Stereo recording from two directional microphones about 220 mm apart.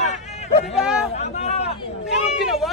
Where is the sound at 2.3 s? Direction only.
Centre (ahead or behind).